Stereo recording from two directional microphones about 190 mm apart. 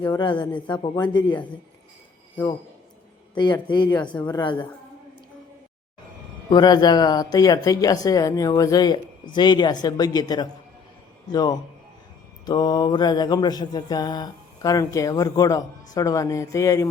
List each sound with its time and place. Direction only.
0.2 s mantra: 25° left (ahead or behind)
3.3 s mantra: 25° left (ahead or behind)
6.5 s mantra: 20° left (ahead or behind)